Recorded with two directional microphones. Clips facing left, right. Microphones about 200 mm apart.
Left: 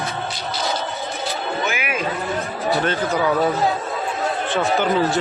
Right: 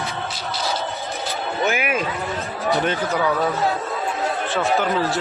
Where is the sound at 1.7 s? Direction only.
45° right (ahead or behind).